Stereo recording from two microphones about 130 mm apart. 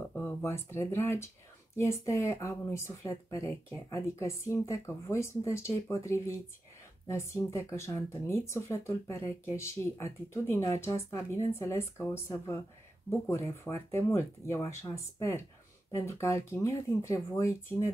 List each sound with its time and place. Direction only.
0.1 s speech: 15° left (ahead or behind)